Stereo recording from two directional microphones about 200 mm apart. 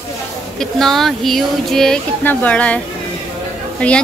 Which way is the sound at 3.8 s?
5° left (ahead or behind).